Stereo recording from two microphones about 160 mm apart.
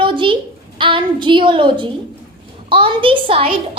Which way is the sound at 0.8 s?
30° right (ahead or behind).